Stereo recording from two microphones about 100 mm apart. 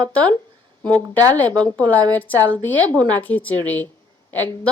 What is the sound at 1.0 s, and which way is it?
Speech, 40° right (ahead or behind).